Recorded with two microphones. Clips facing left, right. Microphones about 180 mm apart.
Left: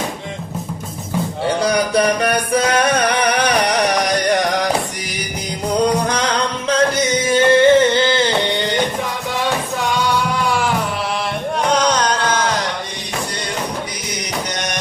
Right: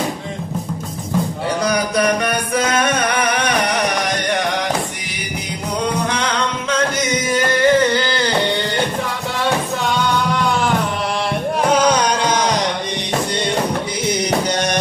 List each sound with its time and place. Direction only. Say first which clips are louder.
1.6 s music: left 1 dB; 30° left (ahead or behind)
6.7 s singing: left 4 dB; 35° left (ahead or behind)
11.6 s music: right 2 dB; 5° right (ahead or behind)